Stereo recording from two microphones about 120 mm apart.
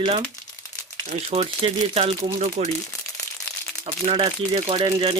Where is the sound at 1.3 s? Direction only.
55° right (ahead or behind).